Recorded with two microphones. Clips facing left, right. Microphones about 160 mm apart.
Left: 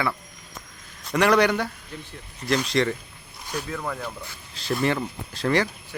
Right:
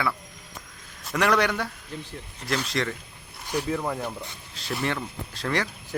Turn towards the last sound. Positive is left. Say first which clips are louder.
# left 5 dB
turn(degrees=5)  # may be behind; listen again after turning